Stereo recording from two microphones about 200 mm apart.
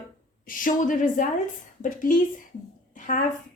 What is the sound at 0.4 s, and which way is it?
A woman's voice, 40° left (ahead or behind).